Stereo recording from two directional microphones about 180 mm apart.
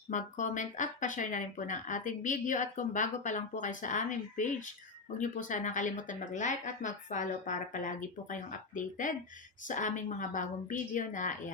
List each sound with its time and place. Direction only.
0.1 s speech: 45° left (ahead or behind)